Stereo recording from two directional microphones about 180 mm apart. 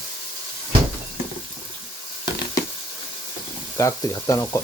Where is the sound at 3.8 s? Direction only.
20° left (ahead or behind).